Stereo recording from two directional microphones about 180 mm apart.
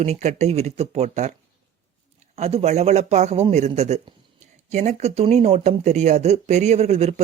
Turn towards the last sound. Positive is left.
turn(degrees=-35)  # may be behind; listen again after turning